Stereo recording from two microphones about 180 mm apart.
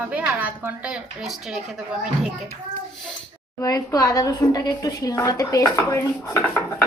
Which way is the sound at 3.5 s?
20° left (ahead or behind).